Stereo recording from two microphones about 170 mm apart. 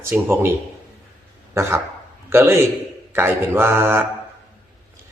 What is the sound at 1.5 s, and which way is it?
Speech, 15° right (ahead or behind).